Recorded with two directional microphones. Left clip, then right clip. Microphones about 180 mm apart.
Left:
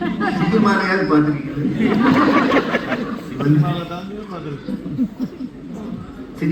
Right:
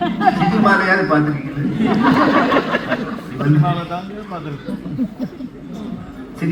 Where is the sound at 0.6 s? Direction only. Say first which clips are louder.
Right 5 dB; 30° right (ahead or behind).